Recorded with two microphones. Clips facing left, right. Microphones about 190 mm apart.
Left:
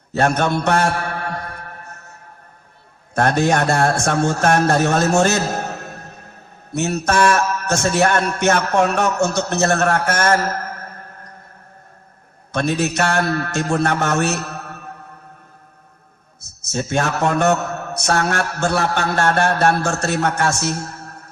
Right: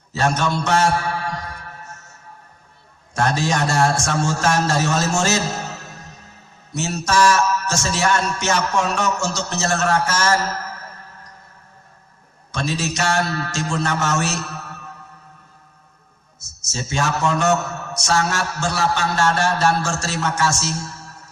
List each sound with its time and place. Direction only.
0.1 s mantra: 60° left (ahead or behind)
3.2 s a man's voice: 60° left (ahead or behind)
12.5 s a man's voice: 60° left (ahead or behind)
16.6 s a man's voice: 60° left (ahead or behind)